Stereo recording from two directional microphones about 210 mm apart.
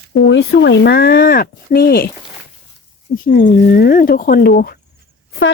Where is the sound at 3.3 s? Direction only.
40° left (ahead or behind).